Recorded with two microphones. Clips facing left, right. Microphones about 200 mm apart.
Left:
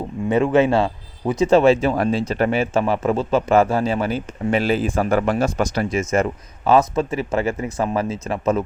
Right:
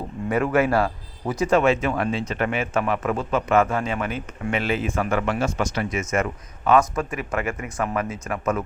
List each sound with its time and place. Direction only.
0.3 s speech: 20° left (ahead or behind)